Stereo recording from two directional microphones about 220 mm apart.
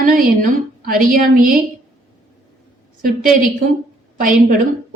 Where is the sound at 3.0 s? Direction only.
40° right (ahead or behind).